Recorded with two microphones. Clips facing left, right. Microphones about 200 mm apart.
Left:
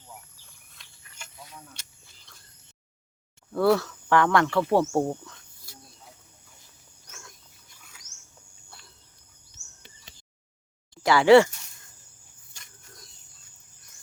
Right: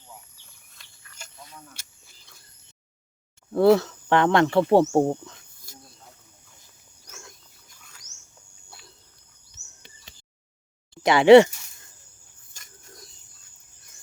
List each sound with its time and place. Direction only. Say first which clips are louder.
1.4 s a sound: even; 5° left (ahead or behind)
3.5 s speech: right 5 dB; 20° right (ahead or behind)
5.7 s snake: right 2 dB; 45° right (ahead or behind)
7.8 s bird: even; 5° left (ahead or behind)
11.0 s speech: right 4 dB; 20° right (ahead or behind)